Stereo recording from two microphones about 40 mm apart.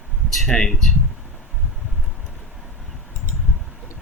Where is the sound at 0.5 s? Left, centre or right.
Centre.